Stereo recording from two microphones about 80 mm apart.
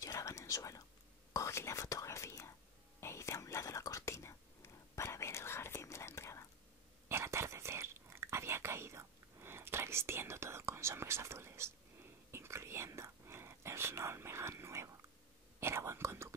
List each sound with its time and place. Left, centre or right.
0.0 s whispering: left
7.1 s whispering: right